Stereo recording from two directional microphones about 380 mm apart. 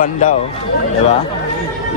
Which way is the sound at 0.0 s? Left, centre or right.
Centre.